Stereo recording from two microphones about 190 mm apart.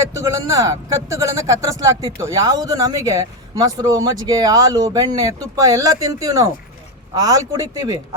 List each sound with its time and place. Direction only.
0.0 s speech: 15° right (ahead or behind)